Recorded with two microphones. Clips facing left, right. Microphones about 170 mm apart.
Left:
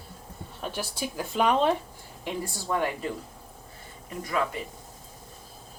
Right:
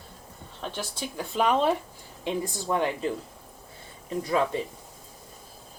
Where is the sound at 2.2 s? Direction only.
20° right (ahead or behind).